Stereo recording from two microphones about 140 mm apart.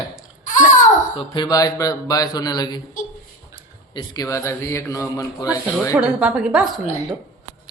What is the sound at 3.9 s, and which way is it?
Speech, 30° left (ahead or behind).